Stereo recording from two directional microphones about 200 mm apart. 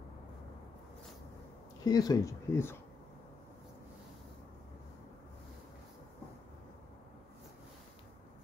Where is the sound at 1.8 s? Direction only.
20° left (ahead or behind).